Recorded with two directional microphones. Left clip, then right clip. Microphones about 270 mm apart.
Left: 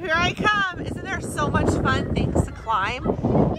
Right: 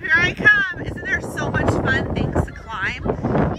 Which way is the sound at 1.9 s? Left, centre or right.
Centre.